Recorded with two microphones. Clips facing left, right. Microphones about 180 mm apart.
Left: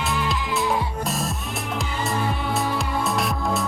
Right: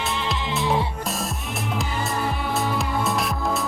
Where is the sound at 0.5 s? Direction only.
Centre (ahead or behind).